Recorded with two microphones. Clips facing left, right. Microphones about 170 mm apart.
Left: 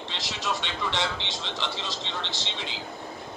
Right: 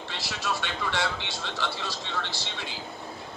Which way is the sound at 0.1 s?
20° left (ahead or behind).